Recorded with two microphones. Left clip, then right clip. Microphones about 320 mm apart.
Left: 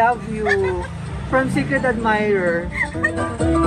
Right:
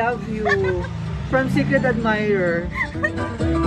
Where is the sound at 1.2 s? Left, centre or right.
Centre.